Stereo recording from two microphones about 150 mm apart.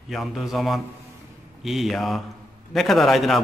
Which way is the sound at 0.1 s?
Centre (ahead or behind).